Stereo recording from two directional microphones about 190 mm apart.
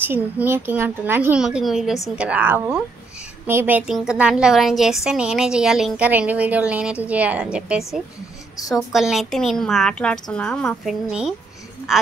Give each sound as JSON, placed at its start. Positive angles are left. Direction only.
{"t": 0.0, "sound": "a woman's voice", "side_deg": -10}